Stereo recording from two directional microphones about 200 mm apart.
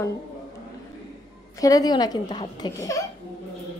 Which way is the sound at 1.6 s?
15° left (ahead or behind).